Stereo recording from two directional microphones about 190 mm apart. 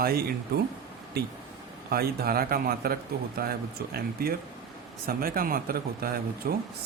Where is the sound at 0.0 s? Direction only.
50° right (ahead or behind).